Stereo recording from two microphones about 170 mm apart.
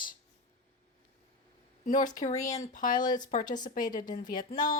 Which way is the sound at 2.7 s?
50° left (ahead or behind).